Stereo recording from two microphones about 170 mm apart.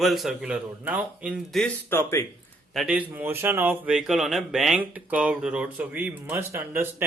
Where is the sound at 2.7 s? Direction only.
5° right (ahead or behind).